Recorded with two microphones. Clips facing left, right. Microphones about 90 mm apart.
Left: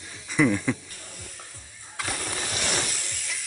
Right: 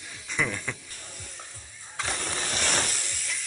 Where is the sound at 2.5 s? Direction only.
35° right (ahead or behind).